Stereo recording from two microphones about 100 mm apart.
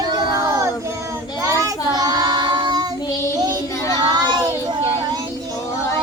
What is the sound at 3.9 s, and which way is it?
Child singing, 45° right (ahead or behind).